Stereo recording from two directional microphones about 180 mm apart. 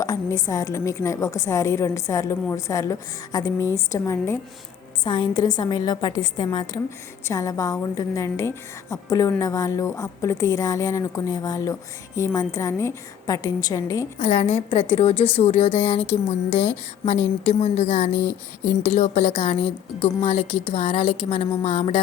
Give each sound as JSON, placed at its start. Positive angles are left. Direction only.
{"t": 0.0, "sound": "a woman's voice", "side_deg": 20}
{"t": 5.0, "sound": "a woman's voice", "side_deg": 25}
{"t": 14.2, "sound": "a woman's voice", "side_deg": 50}
{"t": 14.7, "sound": "a woman's voice", "side_deg": 35}
{"t": 17.5, "sound": "a woman's voice", "side_deg": 40}
{"t": 18.1, "sound": "a woman's voice", "side_deg": 15}
{"t": 18.9, "sound": "a woman's voice", "side_deg": 35}